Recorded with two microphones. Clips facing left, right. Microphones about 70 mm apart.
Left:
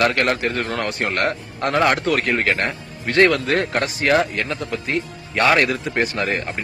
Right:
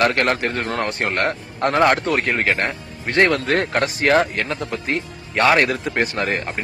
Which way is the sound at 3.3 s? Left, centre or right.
Right.